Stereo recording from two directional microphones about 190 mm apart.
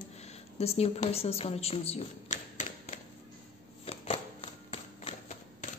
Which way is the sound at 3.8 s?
30° left (ahead or behind).